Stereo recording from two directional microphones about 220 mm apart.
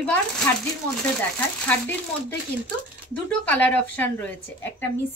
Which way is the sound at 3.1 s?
5° left (ahead or behind).